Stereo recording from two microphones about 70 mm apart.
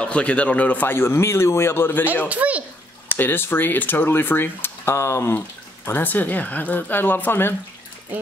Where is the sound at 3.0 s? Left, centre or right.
Left.